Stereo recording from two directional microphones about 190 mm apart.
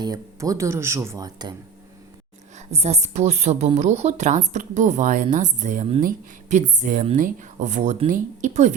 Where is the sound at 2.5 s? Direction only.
35° right (ahead or behind).